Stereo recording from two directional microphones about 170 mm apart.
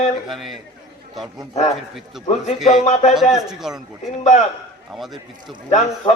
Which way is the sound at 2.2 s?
40° left (ahead or behind).